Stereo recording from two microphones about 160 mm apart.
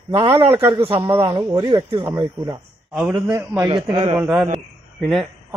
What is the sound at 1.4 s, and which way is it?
Speech, 20° right (ahead or behind).